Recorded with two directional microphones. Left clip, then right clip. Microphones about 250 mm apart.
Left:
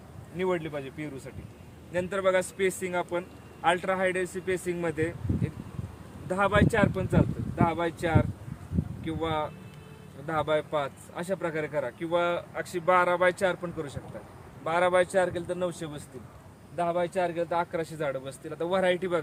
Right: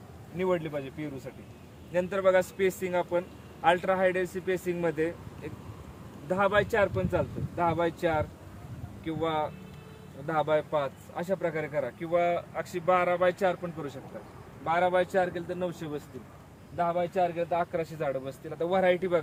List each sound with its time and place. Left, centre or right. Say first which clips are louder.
0.3 s a man's voice: even; centre